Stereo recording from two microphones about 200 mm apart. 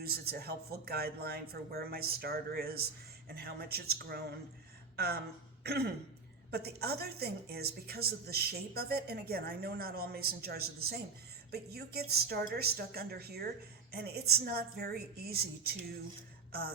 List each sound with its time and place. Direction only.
0.0 s a woman's voice: 50° right (ahead or behind)
5.6 s throat clearing: 55° right (ahead or behind)
6.5 s a woman's voice: 50° right (ahead or behind)